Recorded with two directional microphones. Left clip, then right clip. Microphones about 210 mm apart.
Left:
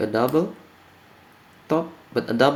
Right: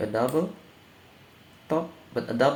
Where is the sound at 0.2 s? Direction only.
50° left (ahead or behind).